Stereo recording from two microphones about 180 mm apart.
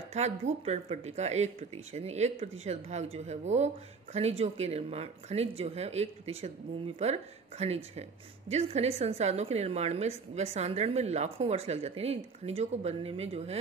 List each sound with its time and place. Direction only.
0.1 s speech: 35° right (ahead or behind)